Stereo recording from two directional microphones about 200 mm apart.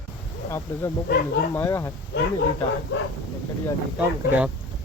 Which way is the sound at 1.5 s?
15° left (ahead or behind).